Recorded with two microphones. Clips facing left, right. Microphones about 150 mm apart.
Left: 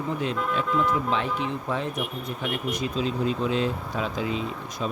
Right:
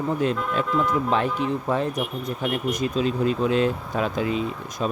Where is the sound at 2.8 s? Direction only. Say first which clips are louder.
Right 3 dB; 50° right (ahead or behind).